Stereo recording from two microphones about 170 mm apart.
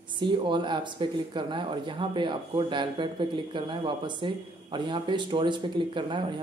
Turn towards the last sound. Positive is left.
turn(degrees=-25)  # may be behind; listen again after turning